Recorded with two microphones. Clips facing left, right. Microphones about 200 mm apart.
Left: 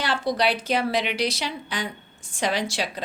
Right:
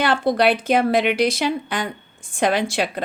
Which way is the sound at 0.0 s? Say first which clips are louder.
Right 6 dB; 55° right (ahead or behind).